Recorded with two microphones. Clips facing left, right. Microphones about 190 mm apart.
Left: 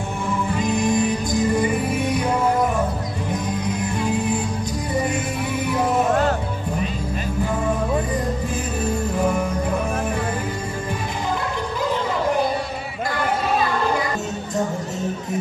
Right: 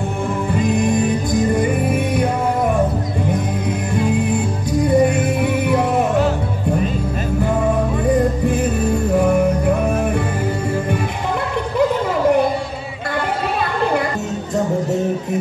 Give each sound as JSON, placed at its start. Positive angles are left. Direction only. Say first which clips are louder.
{"t": 5.0, "sound": "music", "louder": "right 7 dB", "side_deg": -60}